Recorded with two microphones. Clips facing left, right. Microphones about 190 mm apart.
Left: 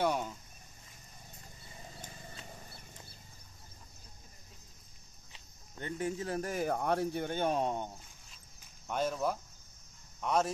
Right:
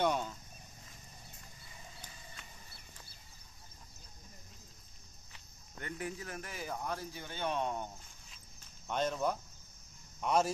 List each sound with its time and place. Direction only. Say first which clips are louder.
0.0 s a sound: left 1 dB; 10° left (ahead or behind)
2.0 s a sound: left 5 dB; 50° left (ahead or behind)
2.4 s horse: left 7 dB; 50° left (ahead or behind)
5.3 s cricket: left 1 dB; 25° left (ahead or behind)
6.5 s speech: left 8 dB; 55° left (ahead or behind); by 7.9 s 30° left (ahead or behind)
8.8 s speech: left 1 dB; 5° left (ahead or behind)